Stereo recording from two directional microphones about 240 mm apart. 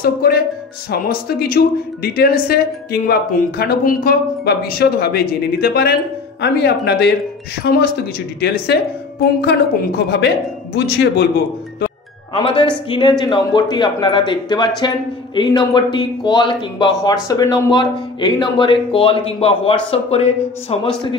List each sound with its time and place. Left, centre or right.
0.0 s a woman's voice: left
9.4 s speech: left
12.4 s speech: left